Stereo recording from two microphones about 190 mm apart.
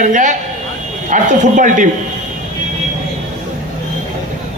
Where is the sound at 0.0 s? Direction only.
40° right (ahead or behind).